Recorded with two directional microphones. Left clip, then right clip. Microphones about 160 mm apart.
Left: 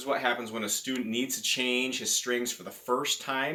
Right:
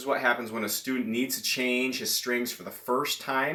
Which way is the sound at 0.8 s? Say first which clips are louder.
Right 2 dB; 5° left (ahead or behind).